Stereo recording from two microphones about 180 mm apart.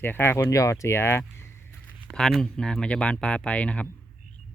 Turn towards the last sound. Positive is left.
turn(degrees=5)  # may be behind; listen again after turning